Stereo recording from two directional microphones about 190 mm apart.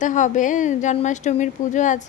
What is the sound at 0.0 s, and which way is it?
A woman's voice, 40° left (ahead or behind).